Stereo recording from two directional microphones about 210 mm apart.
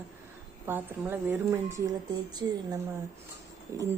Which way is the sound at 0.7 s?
10° right (ahead or behind).